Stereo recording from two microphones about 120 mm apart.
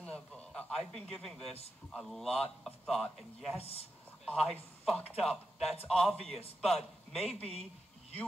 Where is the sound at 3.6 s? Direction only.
55° left (ahead or behind).